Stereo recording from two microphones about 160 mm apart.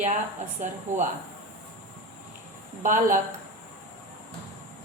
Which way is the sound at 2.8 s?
55° right (ahead or behind).